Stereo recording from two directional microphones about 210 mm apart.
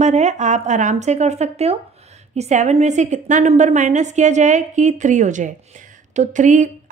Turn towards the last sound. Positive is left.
turn(degrees=-35)  # may be behind; listen again after turning